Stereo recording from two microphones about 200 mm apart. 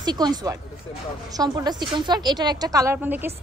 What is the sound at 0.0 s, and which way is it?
A woman's voice, 20° right (ahead or behind).